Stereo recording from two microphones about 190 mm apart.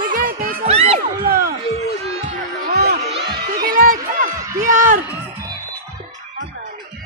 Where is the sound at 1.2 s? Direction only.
50° right (ahead or behind).